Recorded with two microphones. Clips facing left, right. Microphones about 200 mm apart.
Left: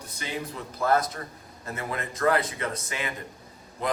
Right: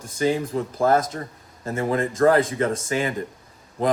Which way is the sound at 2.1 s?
45° right (ahead or behind).